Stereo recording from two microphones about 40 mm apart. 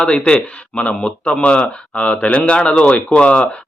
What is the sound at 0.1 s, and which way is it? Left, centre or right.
A man's voice, left.